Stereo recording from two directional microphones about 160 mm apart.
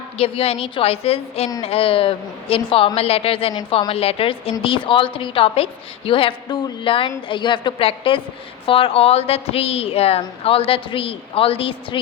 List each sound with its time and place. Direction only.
0.2 s a woman's voice: 40° left (ahead or behind)